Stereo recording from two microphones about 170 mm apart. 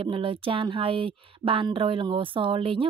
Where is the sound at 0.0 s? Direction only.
30° right (ahead or behind).